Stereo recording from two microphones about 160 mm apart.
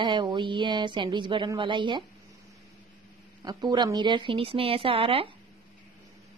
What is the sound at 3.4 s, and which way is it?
Speech, 25° right (ahead or behind).